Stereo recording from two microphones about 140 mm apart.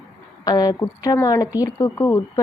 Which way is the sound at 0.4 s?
30° left (ahead or behind).